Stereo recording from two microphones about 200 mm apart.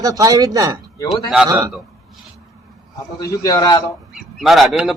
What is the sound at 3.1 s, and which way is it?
Speech, 20° left (ahead or behind).